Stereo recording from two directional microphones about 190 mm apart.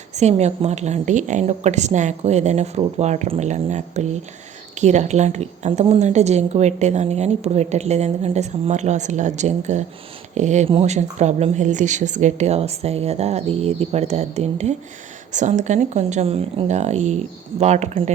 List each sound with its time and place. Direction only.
0.2 s a woman's voice: 35° right (ahead or behind)